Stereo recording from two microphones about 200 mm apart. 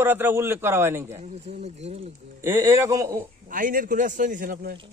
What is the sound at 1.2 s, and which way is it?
Speech, 30° right (ahead or behind).